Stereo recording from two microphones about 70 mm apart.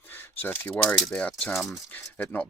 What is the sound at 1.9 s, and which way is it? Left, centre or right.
Speech, left.